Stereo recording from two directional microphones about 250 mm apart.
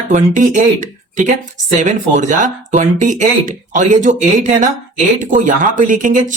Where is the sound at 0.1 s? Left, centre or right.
Right.